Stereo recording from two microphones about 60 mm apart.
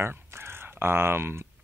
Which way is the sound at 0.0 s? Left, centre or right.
Right.